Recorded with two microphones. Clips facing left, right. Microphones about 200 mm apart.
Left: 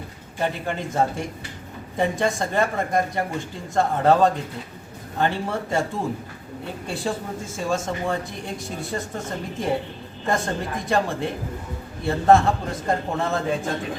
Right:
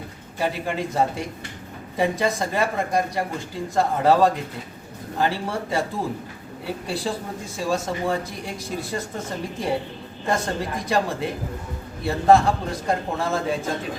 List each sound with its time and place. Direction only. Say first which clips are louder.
0.3 s speech: right 1 dB; 5° right (ahead or behind)